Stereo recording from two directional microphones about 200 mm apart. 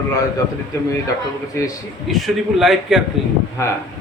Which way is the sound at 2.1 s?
Centre (ahead or behind).